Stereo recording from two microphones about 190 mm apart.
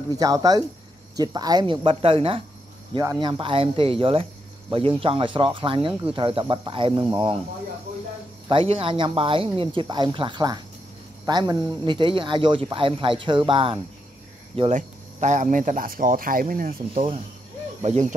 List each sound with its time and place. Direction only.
0.2 s speech: 20° right (ahead or behind)
8.5 s speech: 30° right (ahead or behind)
14.8 s speech: 40° right (ahead or behind)